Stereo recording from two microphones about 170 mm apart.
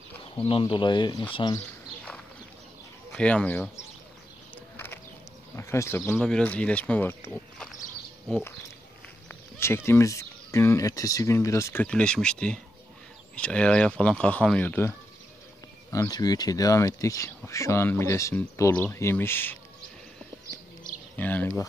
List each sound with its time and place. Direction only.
0.5 s speech: 30° left (ahead or behind)
3.1 s speech: 5° left (ahead or behind)
4.7 s bird: 15° left (ahead or behind)
5.6 s speech: 15° left (ahead or behind)
21.2 s speech: 10° left (ahead or behind)